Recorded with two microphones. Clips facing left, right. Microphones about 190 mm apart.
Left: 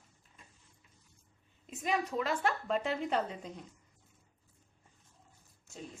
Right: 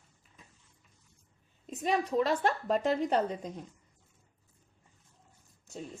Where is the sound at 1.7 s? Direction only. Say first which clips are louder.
Right 4 dB; 30° right (ahead or behind).